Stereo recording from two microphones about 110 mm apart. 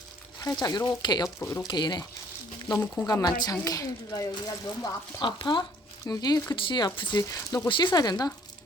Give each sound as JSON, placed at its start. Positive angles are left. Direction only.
{"t": 0.3, "sound": "speech", "side_deg": 35}
{"t": 1.4, "sound": "speech", "side_deg": 25}
{"t": 1.6, "sound": "speech", "side_deg": 40}
{"t": 3.1, "sound": "speech", "side_deg": 35}
{"t": 7.2, "sound": "speech", "side_deg": 30}
{"t": 7.7, "sound": "speech", "side_deg": 45}